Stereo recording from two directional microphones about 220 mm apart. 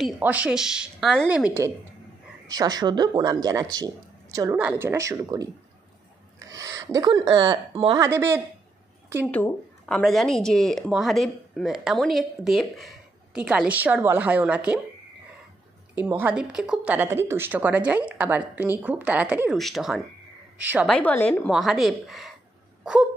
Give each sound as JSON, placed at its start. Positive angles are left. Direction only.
{"t": 0.0, "sound": "speech", "side_deg": -5}
{"t": 8.1, "sound": "speech", "side_deg": -10}
{"t": 9.3, "sound": "speech", "side_deg": 5}
{"t": 15.9, "sound": "a woman's voice", "side_deg": -10}
{"t": 20.9, "sound": "speech", "side_deg": 5}
{"t": 22.8, "sound": "wail", "side_deg": -5}